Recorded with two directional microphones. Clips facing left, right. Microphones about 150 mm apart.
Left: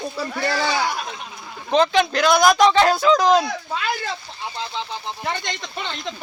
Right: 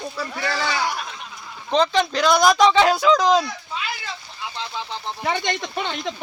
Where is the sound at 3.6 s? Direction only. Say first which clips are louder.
Left 5 dB; 65° left (ahead or behind).